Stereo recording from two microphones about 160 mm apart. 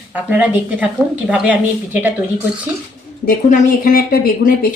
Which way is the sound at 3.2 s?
65° left (ahead or behind).